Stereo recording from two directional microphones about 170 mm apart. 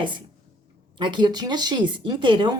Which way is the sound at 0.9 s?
25° right (ahead or behind).